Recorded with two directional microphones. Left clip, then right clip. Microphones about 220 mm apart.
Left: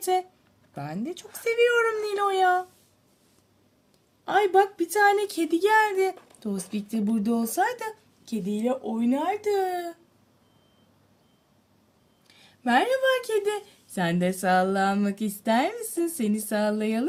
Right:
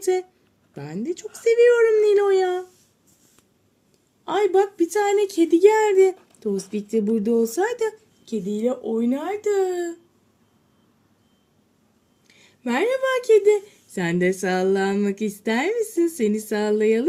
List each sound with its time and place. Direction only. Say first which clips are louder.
0.0 s speech: right 2 dB; 10° left (ahead or behind)
1.5 s speech: right 6 dB; 60° left (ahead or behind)
1.9 s speech: right 9 dB; 10° left (ahead or behind)
4.3 s a woman's voice: right 1 dB; centre (ahead or behind)
12.3 s a woman's voice: left 3 dB; centre (ahead or behind)